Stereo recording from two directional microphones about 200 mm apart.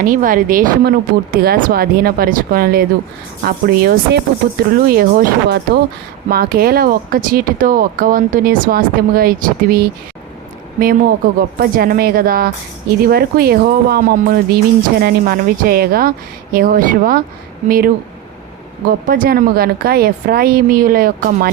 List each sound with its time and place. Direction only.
0.0 s speech: 45° right (ahead or behind)
19.0 s speech: 45° right (ahead or behind)